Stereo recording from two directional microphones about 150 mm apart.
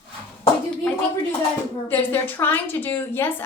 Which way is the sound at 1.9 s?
15° left (ahead or behind).